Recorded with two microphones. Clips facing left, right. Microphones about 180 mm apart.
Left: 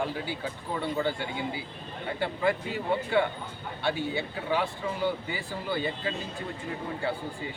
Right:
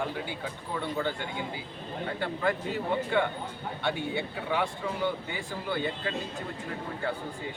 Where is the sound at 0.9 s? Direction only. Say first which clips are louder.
Left 2 dB; 10° left (ahead or behind).